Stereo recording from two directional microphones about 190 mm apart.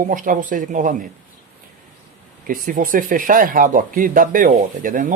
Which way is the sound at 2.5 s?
45° right (ahead or behind).